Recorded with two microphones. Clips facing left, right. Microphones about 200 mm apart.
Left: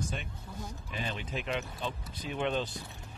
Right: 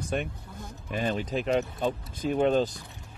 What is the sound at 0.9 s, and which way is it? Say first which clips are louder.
Speech: right 9 dB; 45° right (ahead or behind).